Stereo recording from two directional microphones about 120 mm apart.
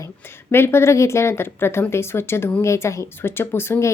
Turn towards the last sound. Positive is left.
turn(degrees=20)  # may be behind; listen again after turning